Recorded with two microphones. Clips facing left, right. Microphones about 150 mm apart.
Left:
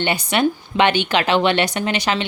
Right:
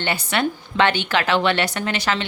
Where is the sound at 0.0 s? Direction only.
15° left (ahead or behind).